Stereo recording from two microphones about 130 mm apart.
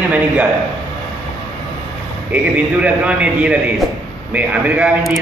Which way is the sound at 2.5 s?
10° right (ahead or behind).